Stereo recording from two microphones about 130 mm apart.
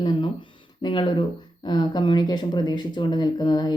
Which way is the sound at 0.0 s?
40° left (ahead or behind).